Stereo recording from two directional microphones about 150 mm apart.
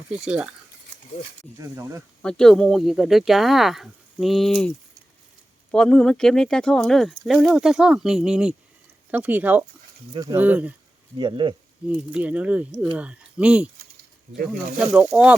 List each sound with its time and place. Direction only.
0.1 s speech: 5° right (ahead or behind)
1.5 s speech: 20° right (ahead or behind)
2.2 s speech: 5° left (ahead or behind)
5.7 s speech: 5° left (ahead or behind)
11.2 s speech: 30° right (ahead or behind)
11.9 s speech: 10° right (ahead or behind)
14.8 s speech: 5° right (ahead or behind)